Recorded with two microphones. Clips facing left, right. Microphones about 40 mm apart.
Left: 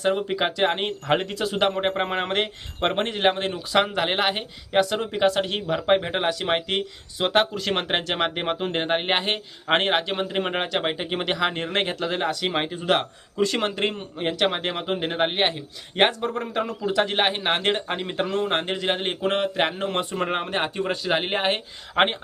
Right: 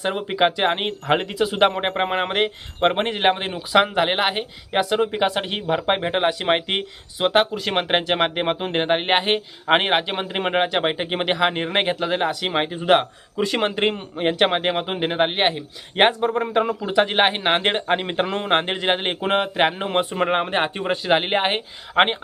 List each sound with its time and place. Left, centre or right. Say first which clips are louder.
0.0 s a man's voice: right 3 dB; centre
1.6 s a man's voice: right 3 dB; right
7.2 s speech: right 3 dB; centre